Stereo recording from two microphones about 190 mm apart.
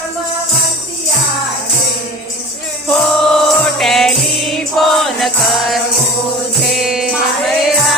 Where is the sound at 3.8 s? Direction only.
Centre (ahead or behind).